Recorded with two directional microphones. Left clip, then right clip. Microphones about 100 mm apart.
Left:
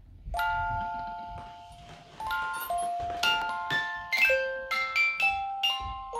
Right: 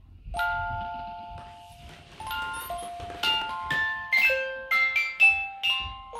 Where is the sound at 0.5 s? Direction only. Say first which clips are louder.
Even; 30° left (ahead or behind).